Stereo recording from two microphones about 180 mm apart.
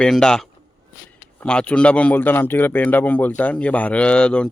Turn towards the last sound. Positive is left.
turn(degrees=5)  # may be behind; listen again after turning